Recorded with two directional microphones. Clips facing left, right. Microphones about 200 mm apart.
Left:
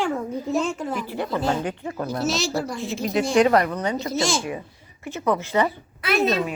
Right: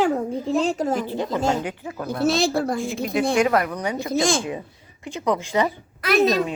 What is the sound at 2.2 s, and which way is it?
Speech, 55° right (ahead or behind).